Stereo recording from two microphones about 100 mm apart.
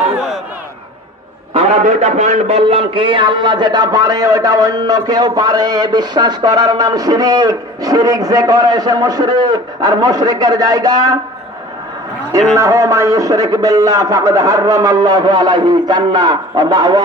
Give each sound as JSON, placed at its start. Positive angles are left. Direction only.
{"t": 1.5, "sound": "a man's voice", "side_deg": -85}
{"t": 12.5, "sound": "a man's voice", "side_deg": -35}